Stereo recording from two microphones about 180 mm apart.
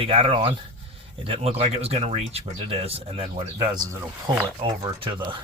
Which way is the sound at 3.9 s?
15° right (ahead or behind).